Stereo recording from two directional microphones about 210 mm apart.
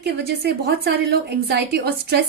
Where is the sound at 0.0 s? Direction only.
50° right (ahead or behind).